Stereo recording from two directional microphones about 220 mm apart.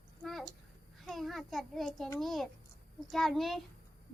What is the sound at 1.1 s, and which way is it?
A child's voice, centre (ahead or behind).